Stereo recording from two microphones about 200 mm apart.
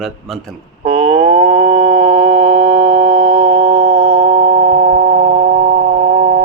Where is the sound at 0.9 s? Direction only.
40° right (ahead or behind); by 2.4 s 25° right (ahead or behind).